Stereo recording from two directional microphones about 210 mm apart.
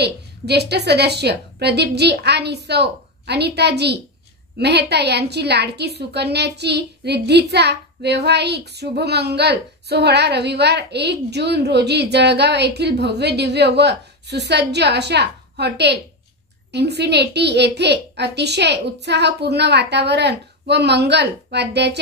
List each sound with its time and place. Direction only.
0.0 s a woman's voice: 50° right (ahead or behind)